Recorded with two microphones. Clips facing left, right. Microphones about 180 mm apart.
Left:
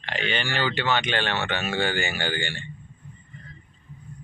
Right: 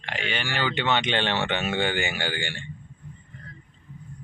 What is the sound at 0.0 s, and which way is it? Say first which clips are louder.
Speech: left 2 dB; 10° right (ahead or behind).